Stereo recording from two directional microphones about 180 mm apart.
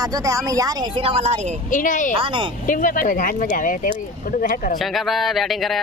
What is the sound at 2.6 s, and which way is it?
Speech, 50° left (ahead or behind).